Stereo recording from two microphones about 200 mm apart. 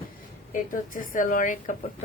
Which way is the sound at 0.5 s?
40° left (ahead or behind).